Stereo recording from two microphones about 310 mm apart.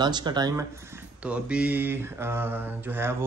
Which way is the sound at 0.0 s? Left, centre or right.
Centre.